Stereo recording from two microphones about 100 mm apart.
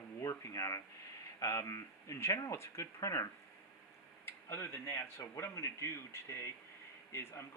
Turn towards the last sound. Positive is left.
turn(degrees=25)  # may be behind; listen again after turning